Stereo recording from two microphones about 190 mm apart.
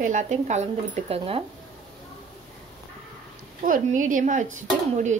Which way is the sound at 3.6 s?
45° right (ahead or behind).